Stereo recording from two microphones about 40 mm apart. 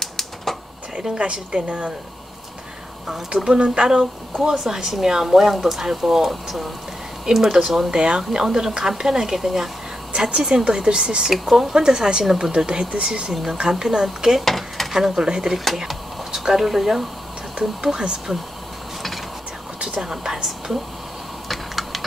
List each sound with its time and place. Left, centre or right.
0.0 s typewriter: centre
1.1 s speech: right
3.4 s speech: right
4.0 s speech: centre
10.1 s speech: centre
13.3 s speech: centre
14.4 s a sound: centre
14.9 s speech: centre
17.9 s speech: right
19.8 s speech: centre
21.5 s typing: centre